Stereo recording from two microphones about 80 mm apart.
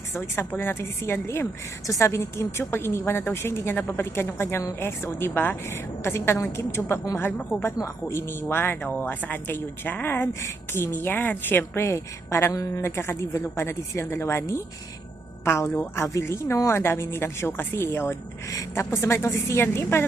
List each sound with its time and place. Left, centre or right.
0.3 s a woman's voice: left
8.0 s a woman's voice: left